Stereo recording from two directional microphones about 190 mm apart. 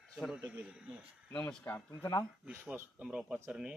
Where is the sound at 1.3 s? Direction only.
10° left (ahead or behind).